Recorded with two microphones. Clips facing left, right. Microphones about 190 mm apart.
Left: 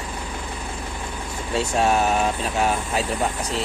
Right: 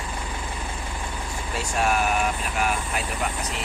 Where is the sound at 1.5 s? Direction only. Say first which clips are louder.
Left 5 dB; 25° left (ahead or behind).